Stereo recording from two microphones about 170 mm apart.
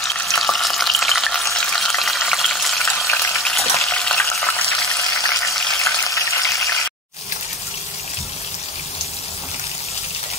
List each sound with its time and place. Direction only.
0.0 s frying: 5° left (ahead or behind)
3.3 s water: centre (ahead or behind)
5.2 s a sound: 20° left (ahead or behind)
5.8 s frying: 20° left (ahead or behind)